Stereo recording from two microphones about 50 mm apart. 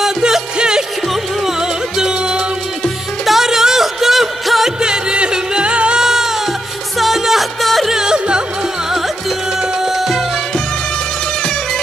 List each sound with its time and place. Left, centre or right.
0.0 s music: centre
7.9 s music: centre
9.6 s music: centre